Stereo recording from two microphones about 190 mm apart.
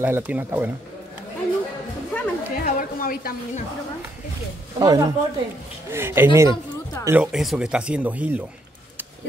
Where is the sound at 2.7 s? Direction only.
50° left (ahead or behind).